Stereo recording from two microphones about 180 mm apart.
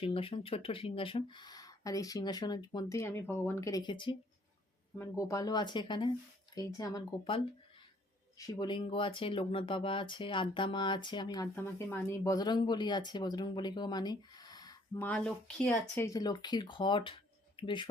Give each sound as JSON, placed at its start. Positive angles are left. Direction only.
{"t": 0.0, "sound": "speech", "side_deg": 30}
{"t": 11.5, "sound": "speech", "side_deg": 10}
{"t": 15.0, "sound": "speech", "side_deg": 5}
{"t": 16.0, "sound": "speech", "side_deg": 20}